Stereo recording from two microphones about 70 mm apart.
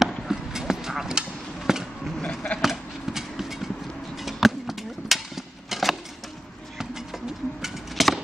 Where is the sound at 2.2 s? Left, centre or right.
Centre.